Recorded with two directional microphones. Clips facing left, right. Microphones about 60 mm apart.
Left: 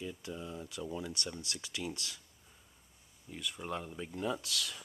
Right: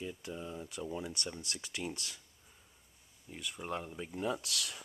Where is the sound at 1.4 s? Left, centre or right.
Right.